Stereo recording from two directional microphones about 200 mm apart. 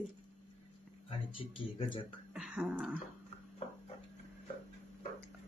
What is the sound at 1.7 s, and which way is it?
Speech, 25° left (ahead or behind).